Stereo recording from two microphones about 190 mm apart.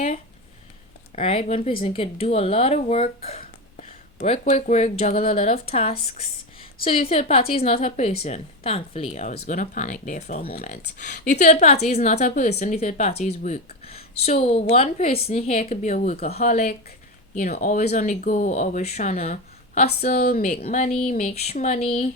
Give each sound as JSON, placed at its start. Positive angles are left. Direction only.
{"t": 1.2, "sound": "speech", "side_deg": 30}
{"t": 7.1, "sound": "speech", "side_deg": 30}
{"t": 9.5, "sound": "speech", "side_deg": 45}
{"t": 10.4, "sound": "speech", "side_deg": 50}
{"t": 11.3, "sound": "speech", "side_deg": 35}
{"t": 16.2, "sound": "speech", "side_deg": 35}
{"t": 16.5, "sound": "speech", "side_deg": 50}
{"t": 19.2, "sound": "a sound", "side_deg": 40}
{"t": 20.0, "sound": "speech", "side_deg": 50}
{"t": 20.8, "sound": "speech", "side_deg": 40}